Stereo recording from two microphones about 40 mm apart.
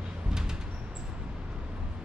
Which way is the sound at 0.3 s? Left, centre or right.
Centre.